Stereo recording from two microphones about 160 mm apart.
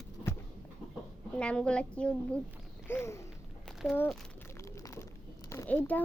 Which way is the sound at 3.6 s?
Centre (ahead or behind).